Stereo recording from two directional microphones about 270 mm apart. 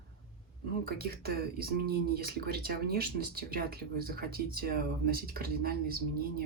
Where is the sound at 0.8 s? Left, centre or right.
Right.